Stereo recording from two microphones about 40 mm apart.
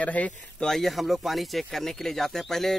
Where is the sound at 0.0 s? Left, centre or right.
Left.